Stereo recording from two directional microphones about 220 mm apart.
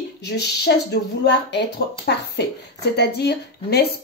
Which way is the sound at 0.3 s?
50° left (ahead or behind).